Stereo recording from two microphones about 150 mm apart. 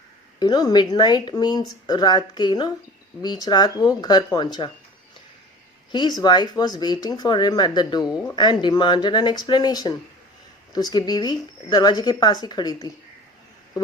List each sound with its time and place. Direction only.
0.3 s speech: 25° left (ahead or behind)
5.9 s speech: 30° left (ahead or behind)